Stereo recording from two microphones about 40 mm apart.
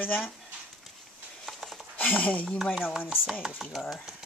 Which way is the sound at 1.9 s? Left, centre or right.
Left.